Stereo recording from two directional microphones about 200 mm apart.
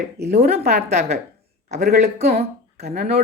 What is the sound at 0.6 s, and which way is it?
Speech, 50° right (ahead or behind).